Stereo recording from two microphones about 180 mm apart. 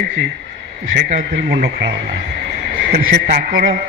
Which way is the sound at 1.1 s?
60° right (ahead or behind).